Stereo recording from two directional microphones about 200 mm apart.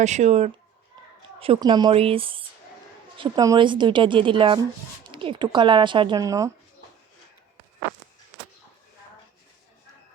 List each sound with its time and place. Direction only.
0.0 s speech: 35° right (ahead or behind); by 6.5 s 15° right (ahead or behind)